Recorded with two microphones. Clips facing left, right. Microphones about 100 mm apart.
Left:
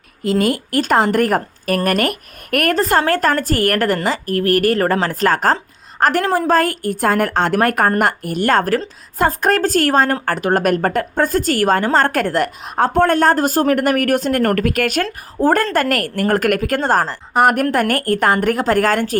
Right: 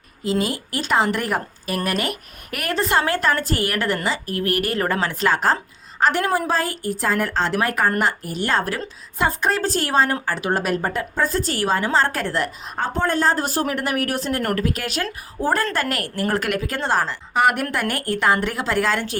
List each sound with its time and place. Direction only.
0.2 s a woman's voice: 55° left (ahead or behind)